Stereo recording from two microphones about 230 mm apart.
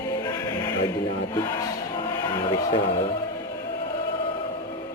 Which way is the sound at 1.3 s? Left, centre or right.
Centre.